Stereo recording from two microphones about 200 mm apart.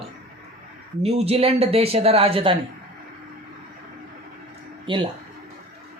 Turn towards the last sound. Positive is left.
turn(degrees=-25)  # may be behind; listen again after turning